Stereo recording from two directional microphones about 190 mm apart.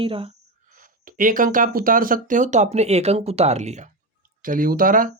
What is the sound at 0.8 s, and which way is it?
Speech, 45° right (ahead or behind).